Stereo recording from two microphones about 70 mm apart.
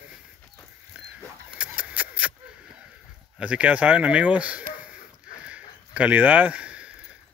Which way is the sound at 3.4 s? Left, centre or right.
Centre.